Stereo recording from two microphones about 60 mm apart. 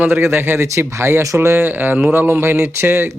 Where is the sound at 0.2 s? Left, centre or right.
Right.